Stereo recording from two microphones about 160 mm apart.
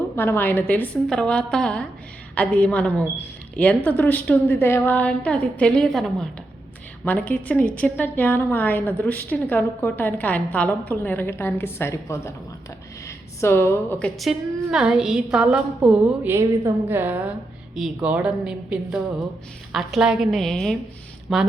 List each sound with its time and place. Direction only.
0.2 s a woman's voice: 15° left (ahead or behind)
14.2 s a woman's voice: 5° right (ahead or behind)